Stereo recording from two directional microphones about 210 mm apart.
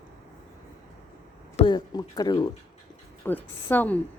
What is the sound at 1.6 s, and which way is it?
Speech, 20° left (ahead or behind).